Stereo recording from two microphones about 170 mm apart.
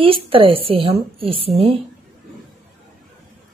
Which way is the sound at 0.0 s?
30° right (ahead or behind).